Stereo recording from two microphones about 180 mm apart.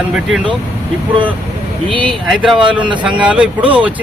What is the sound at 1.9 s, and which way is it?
Speech, 30° right (ahead or behind).